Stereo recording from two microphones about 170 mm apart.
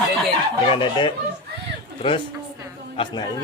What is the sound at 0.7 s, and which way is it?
Speech, 30° left (ahead or behind).